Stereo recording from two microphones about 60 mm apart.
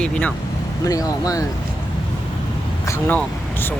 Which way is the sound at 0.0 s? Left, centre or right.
Left.